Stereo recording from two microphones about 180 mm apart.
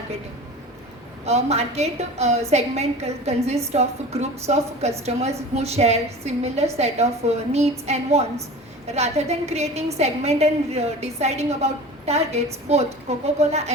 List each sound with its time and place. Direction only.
1.2 s a woman's voice: 35° right (ahead or behind)